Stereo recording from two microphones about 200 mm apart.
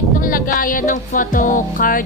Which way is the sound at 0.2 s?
45° left (ahead or behind).